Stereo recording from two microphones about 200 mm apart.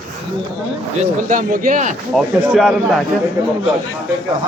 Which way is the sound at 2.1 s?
5° right (ahead or behind).